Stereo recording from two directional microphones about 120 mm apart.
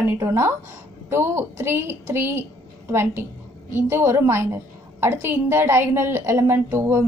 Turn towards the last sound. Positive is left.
turn(degrees=-20)  # may be behind; listen again after turning